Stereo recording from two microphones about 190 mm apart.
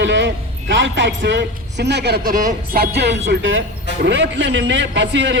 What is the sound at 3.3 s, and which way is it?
A man's voice, 75° right (ahead or behind).